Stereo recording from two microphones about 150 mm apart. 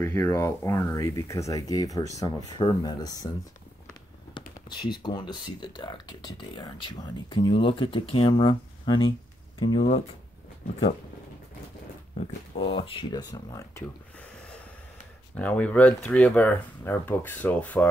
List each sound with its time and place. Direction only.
0.0 s speech: 20° left (ahead or behind)
4.3 s speech: 30° left (ahead or behind)
12.2 s speech: 40° left (ahead or behind)
13.2 s speech: 25° left (ahead or behind)
15.3 s speech: 10° left (ahead or behind)